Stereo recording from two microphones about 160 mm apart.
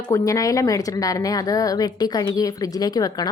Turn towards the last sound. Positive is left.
turn(degrees=25)  # may be behind; listen again after turning